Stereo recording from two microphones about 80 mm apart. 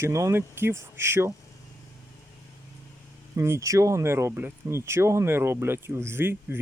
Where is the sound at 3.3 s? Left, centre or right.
Right.